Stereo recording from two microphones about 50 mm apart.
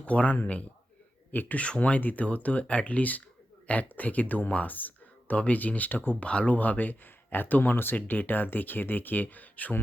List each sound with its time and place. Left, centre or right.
0.0 s speech: left
1.6 s speech: left
2.0 s speech: left
6.1 s speech: left